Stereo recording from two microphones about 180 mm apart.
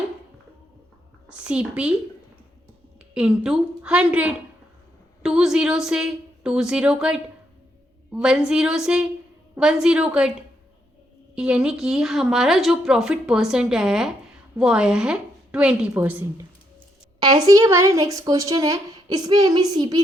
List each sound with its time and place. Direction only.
1.3 s a woman's voice: 5° right (ahead or behind)
3.2 s a woman's voice: 5° right (ahead or behind)
11.3 s a woman's voice: 5° right (ahead or behind)
17.2 s speech: 20° right (ahead or behind)